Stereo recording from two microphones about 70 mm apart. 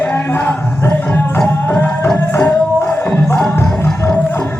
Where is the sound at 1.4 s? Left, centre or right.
Left.